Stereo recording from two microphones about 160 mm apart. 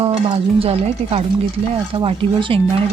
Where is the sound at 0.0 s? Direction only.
35° right (ahead or behind).